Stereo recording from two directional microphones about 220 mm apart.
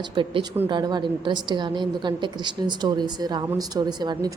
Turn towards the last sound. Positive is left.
turn(degrees=-20)  # may be behind; listen again after turning